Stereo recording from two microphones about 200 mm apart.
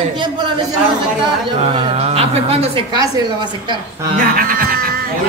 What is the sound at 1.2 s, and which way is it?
A woman's voice, 30° right (ahead or behind).